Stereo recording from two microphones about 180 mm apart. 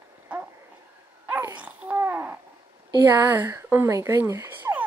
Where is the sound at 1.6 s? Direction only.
10° right (ahead or behind).